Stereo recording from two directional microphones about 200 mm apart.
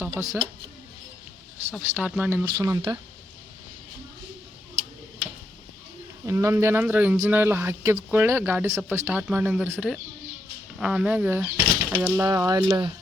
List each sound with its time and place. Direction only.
0.0 s speech: 10° right (ahead or behind)
1.8 s speech: 5° right (ahead or behind)
2.4 s speech: 20° right (ahead or behind)
6.2 s speech: 15° right (ahead or behind)
8.7 s speech: centre (ahead or behind); by 12.9 s 20° right (ahead or behind)